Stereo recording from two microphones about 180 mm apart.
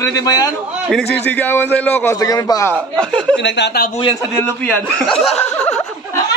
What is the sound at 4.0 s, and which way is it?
Speech, 25° left (ahead or behind).